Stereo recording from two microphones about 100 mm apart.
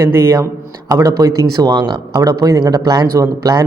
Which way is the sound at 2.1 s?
35° right (ahead or behind).